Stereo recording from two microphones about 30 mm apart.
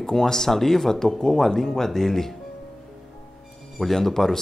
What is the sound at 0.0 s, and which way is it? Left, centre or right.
Speech, centre.